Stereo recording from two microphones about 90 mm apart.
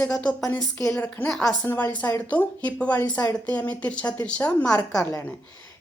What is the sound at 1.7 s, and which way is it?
A woman's voice, 25° left (ahead or behind).